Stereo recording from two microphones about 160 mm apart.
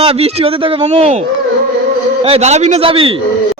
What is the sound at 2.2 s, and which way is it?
Speech, 40° right (ahead or behind).